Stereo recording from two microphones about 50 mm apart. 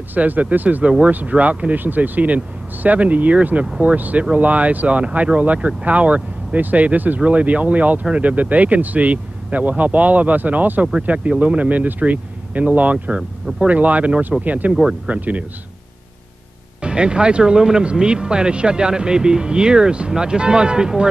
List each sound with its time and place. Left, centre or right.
0.1 s speech: right
0.8 s speech: right
14.7 s speech: centre
15.0 s speech: right
16.8 s speech: centre